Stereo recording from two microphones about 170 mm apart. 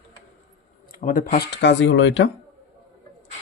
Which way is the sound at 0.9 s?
55° left (ahead or behind).